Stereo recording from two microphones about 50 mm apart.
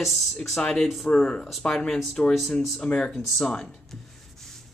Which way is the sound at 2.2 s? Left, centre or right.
Centre.